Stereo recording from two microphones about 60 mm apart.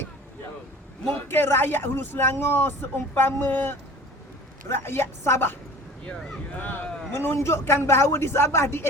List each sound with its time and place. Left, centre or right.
1.1 s speech: left
6.6 s speech: left
7.2 s speech: left